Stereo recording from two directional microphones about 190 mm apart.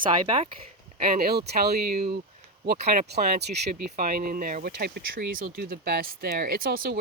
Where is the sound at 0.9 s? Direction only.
50° right (ahead or behind).